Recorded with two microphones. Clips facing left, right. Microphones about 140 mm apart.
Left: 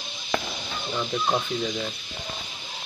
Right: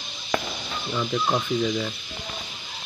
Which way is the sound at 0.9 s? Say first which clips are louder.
Right 1 dB; 5° left (ahead or behind).